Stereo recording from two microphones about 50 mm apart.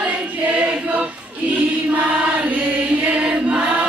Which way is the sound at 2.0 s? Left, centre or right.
Right.